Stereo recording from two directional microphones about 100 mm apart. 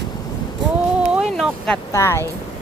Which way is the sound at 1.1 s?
5° right (ahead or behind).